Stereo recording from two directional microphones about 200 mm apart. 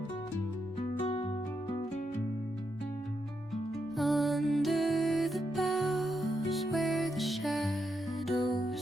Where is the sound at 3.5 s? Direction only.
Centre (ahead or behind).